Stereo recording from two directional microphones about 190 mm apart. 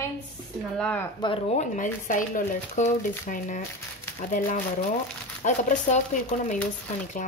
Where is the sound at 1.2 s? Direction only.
30° left (ahead or behind).